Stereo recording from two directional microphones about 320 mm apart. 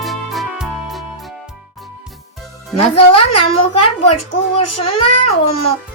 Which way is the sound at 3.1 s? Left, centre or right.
Left.